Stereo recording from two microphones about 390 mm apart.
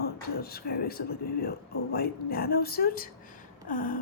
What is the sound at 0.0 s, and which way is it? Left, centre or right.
Speech, left.